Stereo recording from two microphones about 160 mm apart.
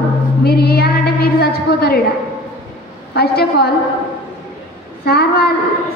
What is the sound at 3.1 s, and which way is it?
Speech, 85° left.